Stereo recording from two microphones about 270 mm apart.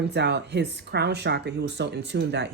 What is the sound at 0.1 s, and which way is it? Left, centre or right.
Speech, right.